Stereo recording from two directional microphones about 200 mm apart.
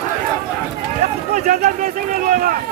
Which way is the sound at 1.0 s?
40° right (ahead or behind).